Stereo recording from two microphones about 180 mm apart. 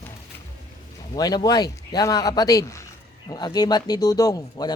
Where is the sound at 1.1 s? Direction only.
20° left (ahead or behind).